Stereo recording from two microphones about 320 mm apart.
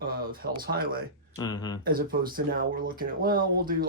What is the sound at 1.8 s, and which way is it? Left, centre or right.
Speech, right.